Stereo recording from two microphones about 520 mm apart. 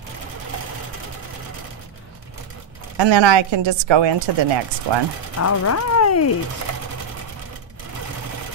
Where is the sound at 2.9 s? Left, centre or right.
Right.